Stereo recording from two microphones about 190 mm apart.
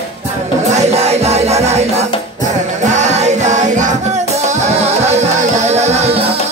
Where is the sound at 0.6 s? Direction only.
35° right (ahead or behind).